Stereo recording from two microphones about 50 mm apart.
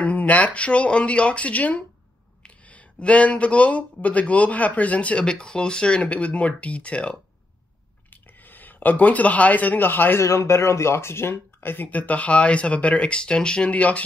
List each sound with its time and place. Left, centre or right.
0.0 s speech: left
8.1 s speech: left
10.1 s speech: left
11.9 s speech: left
13.7 s speech: left